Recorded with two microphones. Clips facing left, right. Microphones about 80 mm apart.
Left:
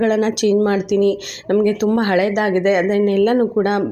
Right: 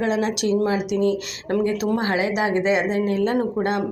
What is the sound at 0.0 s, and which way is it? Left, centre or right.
Speech, left.